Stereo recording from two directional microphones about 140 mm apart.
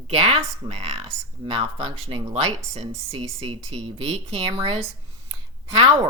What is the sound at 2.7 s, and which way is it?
Speech, 50° right (ahead or behind).